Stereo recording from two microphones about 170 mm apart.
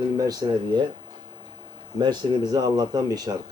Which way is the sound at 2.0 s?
25° right (ahead or behind).